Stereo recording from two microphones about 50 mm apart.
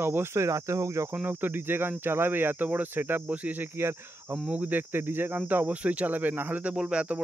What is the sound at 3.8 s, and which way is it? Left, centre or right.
Speech, right.